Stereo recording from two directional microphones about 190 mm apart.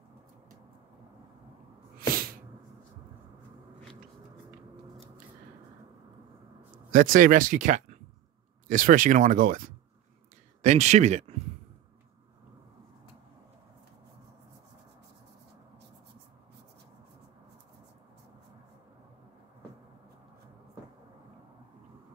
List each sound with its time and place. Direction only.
2.0 s sneeze: 50° right (ahead or behind)
6.9 s speech: 45° right (ahead or behind)
10.6 s speech: 35° right (ahead or behind)